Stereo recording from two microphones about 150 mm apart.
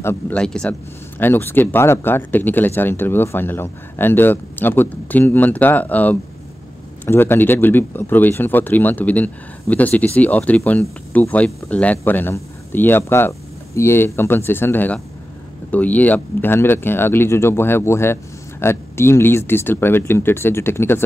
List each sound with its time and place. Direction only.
0.0 s speech: 15° left (ahead or behind)
0.4 s speech: 5° left (ahead or behind)